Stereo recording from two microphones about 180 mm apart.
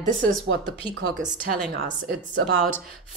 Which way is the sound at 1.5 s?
55° right (ahead or behind).